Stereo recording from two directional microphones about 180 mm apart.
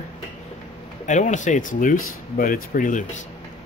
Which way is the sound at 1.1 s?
40° left (ahead or behind).